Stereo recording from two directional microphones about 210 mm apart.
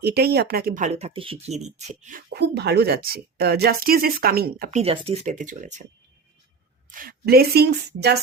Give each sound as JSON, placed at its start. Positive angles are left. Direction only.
{"t": 0.0, "sound": "speech", "side_deg": -50}
{"t": 4.7, "sound": "speech", "side_deg": -30}
{"t": 6.9, "sound": "speech", "side_deg": -45}